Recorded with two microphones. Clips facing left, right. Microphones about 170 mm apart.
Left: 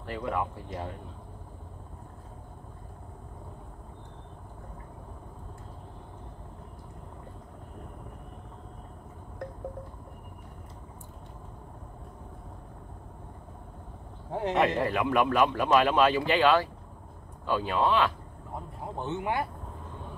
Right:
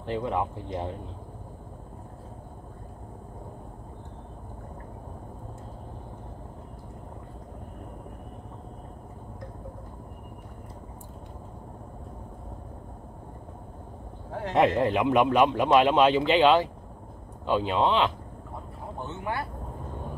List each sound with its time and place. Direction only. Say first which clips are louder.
0.0 s speech: right 3 dB; 20° right (ahead or behind)
14.5 s speech: right 4 dB; 20° right (ahead or behind)
18.9 s speech: left 3 dB; 20° left (ahead or behind)